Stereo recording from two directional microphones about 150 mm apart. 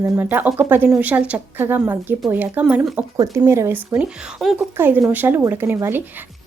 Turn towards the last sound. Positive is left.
turn(degrees=-15)  # may be behind; listen again after turning